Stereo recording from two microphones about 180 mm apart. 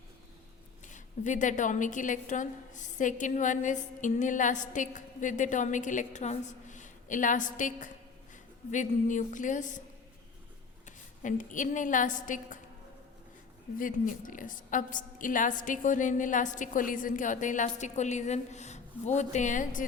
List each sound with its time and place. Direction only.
0.9 s a woman's voice: 45° left (ahead or behind)
10.8 s a woman's voice: 45° left (ahead or behind)
13.7 s a woman's voice: 50° left (ahead or behind)